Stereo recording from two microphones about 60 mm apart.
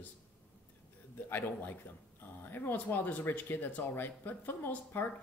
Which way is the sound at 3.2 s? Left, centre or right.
Left.